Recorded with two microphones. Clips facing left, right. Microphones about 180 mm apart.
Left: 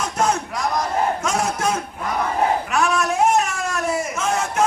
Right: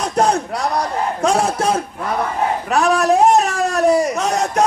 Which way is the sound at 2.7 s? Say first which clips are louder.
Right 10 dB; 35° right (ahead or behind).